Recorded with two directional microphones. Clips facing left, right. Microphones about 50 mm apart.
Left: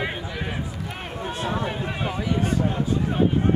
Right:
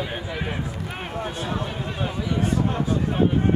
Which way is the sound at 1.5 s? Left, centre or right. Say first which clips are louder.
Left 2 dB; left.